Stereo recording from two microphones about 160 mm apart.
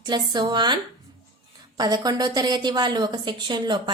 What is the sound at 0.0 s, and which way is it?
A woman's voice, 25° right (ahead or behind).